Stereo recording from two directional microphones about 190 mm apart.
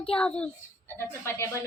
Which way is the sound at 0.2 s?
5° left (ahead or behind).